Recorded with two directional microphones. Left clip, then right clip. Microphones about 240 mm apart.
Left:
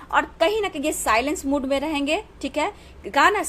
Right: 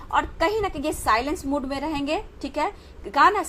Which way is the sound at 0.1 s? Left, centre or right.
Left.